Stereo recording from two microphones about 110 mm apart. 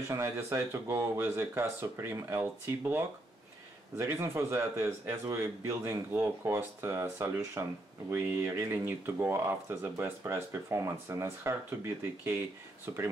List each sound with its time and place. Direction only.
0.1 s speech: 25° right (ahead or behind)